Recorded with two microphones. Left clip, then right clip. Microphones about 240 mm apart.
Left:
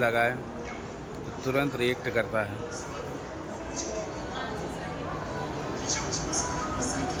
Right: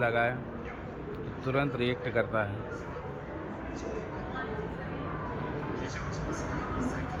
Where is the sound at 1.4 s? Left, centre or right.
Centre.